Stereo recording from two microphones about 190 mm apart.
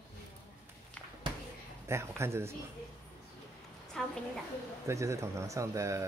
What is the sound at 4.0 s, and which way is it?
Speech, centre (ahead or behind).